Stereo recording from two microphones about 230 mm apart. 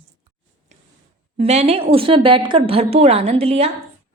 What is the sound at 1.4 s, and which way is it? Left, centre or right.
Speech, right.